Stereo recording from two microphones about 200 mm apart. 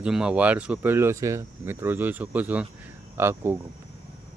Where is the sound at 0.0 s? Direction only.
5° right (ahead or behind).